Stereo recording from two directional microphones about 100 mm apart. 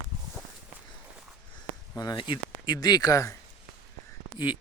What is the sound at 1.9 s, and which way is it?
Speech, 40° left (ahead or behind).